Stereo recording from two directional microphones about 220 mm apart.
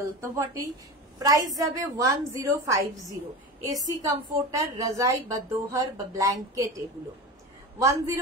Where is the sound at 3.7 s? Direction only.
15° right (ahead or behind).